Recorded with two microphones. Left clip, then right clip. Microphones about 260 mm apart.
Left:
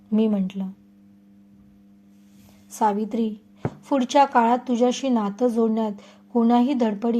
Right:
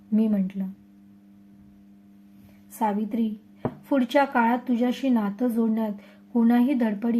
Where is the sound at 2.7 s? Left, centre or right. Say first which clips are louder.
Left 4 dB; left.